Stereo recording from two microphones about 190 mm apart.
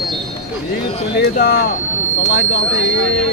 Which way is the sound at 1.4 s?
65° left (ahead or behind).